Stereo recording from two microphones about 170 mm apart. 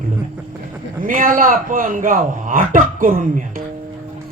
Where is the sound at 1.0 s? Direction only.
55° right (ahead or behind).